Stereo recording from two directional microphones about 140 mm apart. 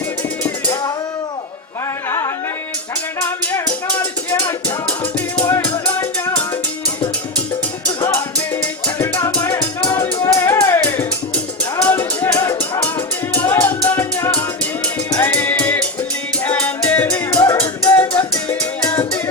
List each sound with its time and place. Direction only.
2.0 s music: 20° left (ahead or behind)
5.5 s music: 20° left (ahead or behind)
7.9 s music: 15° left (ahead or behind)